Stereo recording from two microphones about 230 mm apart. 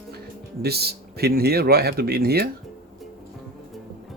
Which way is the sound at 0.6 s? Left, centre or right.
Right.